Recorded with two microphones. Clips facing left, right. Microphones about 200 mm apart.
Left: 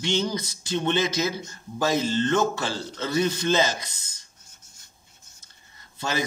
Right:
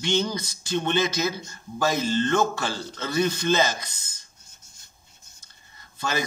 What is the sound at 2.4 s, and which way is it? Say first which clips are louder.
Speech: even; 50° right (ahead or behind).